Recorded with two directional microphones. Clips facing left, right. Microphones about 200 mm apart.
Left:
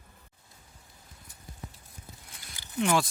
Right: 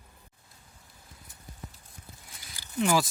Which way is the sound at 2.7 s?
Centre (ahead or behind).